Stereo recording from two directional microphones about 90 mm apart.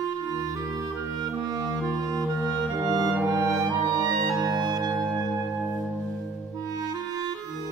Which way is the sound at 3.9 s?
45° right (ahead or behind).